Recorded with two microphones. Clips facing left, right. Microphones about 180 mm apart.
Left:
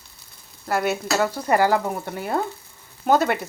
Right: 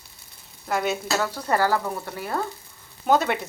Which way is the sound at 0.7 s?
5° left (ahead or behind).